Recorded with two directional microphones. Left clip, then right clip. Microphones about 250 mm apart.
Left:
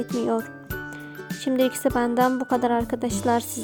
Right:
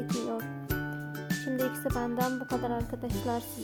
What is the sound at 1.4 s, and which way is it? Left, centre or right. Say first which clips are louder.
Speech: left 11 dB; left.